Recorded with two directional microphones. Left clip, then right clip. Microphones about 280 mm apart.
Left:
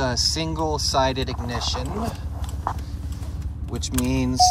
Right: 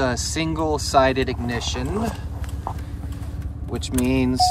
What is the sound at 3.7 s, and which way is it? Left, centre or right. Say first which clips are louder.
Speech: right 3 dB; centre.